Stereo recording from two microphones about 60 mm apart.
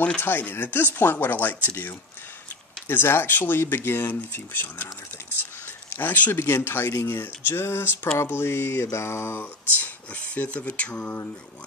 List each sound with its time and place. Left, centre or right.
0.0 s speech: left
2.9 s speech: left
5.9 s speech: left
6.4 s speech: left
8.2 s mantra: left
9.4 s speech: left